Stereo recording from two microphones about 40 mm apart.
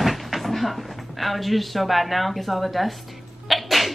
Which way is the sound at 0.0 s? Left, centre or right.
Centre.